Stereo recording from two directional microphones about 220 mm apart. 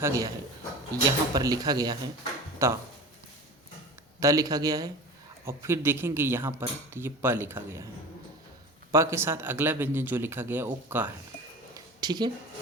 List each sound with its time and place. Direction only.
0.0 s speech: 15° right (ahead or behind)
4.2 s speech: 15° right (ahead or behind)
8.9 s speech: 15° right (ahead or behind)
11.7 s a sound: 20° right (ahead or behind)